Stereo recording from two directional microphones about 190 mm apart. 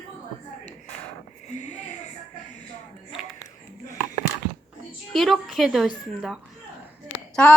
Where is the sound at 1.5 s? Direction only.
40° left (ahead or behind).